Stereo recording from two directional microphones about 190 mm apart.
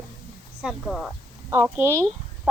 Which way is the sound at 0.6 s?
Centre (ahead or behind).